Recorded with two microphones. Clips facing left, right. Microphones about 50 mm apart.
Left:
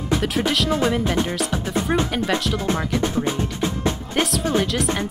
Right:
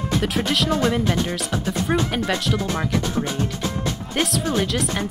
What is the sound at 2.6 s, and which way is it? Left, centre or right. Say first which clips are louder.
Music: left 1 dB; left.